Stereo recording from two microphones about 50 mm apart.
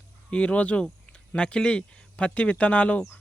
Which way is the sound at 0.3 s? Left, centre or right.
Left.